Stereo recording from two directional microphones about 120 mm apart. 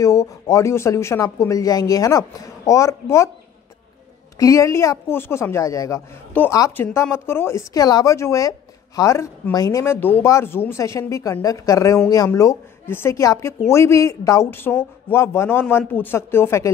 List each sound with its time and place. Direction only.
0.0 s speech: 25° left (ahead or behind)
4.4 s speech: 25° left (ahead or behind)